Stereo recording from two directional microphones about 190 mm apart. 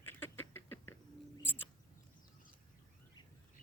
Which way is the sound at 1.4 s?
10° left (ahead or behind).